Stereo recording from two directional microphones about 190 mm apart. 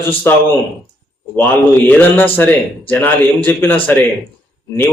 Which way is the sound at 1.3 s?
10° left (ahead or behind).